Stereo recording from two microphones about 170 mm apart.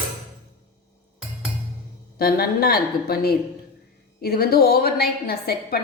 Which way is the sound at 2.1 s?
65° left (ahead or behind).